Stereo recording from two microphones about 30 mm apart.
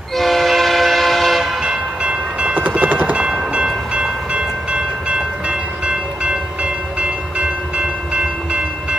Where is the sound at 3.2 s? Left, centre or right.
Right.